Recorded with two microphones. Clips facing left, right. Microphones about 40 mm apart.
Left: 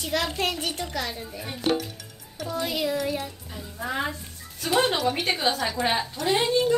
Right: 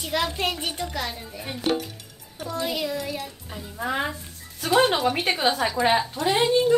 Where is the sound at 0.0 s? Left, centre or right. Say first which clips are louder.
Right 1 dB; centre.